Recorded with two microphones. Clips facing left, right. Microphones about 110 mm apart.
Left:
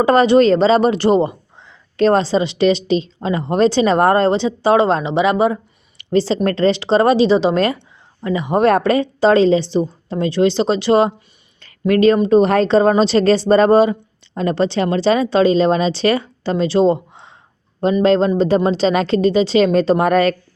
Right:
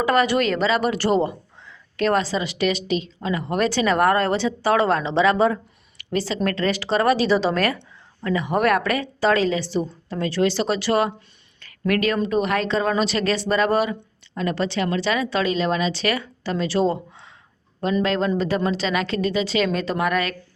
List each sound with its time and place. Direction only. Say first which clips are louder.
0.0 s a woman's voice: left 8 dB; 30° left (ahead or behind)
6.0 s a woman's voice: left 8 dB; 30° left (ahead or behind)